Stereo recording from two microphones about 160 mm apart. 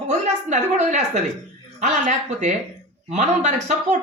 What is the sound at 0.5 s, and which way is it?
Speech, 50° right (ahead or behind).